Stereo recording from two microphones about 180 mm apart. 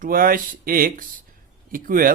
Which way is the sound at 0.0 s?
50° right (ahead or behind).